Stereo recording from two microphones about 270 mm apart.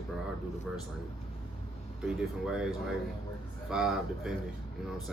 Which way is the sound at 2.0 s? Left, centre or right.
Centre.